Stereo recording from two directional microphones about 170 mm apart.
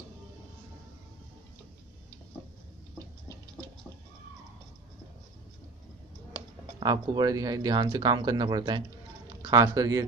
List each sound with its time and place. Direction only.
6.8 s speech: 25° right (ahead or behind)